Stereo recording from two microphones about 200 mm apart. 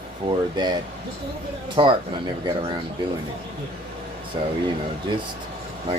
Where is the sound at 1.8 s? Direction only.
25° right (ahead or behind).